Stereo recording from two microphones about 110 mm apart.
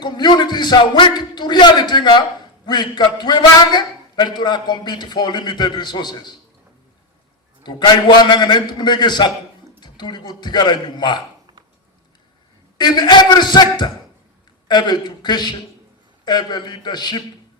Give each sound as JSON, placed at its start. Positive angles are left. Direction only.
{"t": 0.0, "sound": "a man's voice", "side_deg": 40}
{"t": 7.6, "sound": "a man's voice", "side_deg": 40}
{"t": 12.7, "sound": "a man's voice", "side_deg": 40}